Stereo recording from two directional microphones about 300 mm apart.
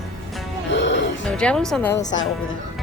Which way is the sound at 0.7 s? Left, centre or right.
Left.